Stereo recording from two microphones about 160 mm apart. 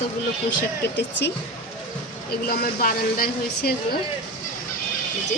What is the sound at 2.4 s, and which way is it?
Speech, 65° left (ahead or behind).